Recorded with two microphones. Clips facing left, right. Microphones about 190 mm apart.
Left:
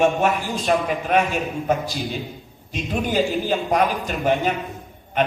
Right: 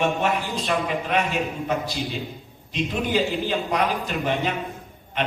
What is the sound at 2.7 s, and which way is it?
A man's voice, 45° left (ahead or behind).